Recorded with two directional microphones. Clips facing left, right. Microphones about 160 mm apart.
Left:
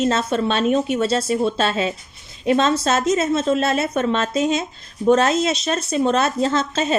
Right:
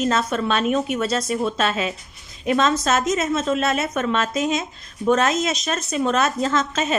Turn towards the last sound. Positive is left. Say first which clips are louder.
# left 2 dB
turn(degrees=30)  # may be behind; listen again after turning